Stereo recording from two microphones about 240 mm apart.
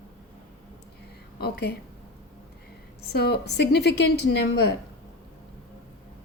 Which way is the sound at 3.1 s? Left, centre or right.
Left.